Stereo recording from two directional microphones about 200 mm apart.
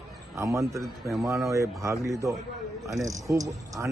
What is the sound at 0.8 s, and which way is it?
Speech, centre (ahead or behind).